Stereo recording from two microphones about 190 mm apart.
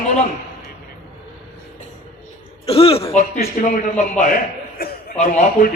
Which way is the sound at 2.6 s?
30° left (ahead or behind).